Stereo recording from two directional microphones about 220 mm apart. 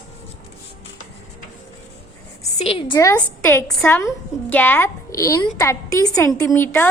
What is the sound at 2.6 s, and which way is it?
Speech, 25° left (ahead or behind).